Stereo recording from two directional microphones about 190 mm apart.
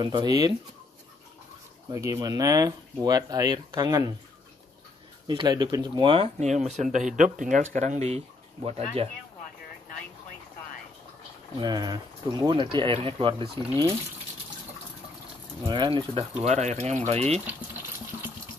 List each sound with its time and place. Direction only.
0.0 s speech: 25° right (ahead or behind)
1.9 s speech: 20° right (ahead or behind)
5.2 s speech: 25° right (ahead or behind)
11.6 s speech: 20° right (ahead or behind)
15.6 s speech: 25° right (ahead or behind)